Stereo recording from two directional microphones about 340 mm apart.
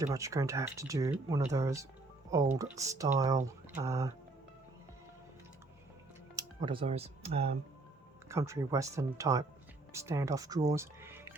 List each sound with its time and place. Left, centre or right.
0.0 s speech: centre
6.3 s speech: centre